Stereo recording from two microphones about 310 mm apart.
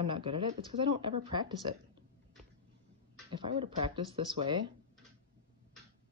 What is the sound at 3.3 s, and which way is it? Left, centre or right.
A woman's voice, centre.